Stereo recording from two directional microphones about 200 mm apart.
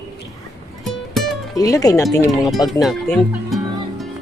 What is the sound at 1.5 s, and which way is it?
Speech, 15° left (ahead or behind).